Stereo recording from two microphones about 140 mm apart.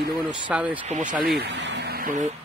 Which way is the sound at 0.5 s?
10° right (ahead or behind).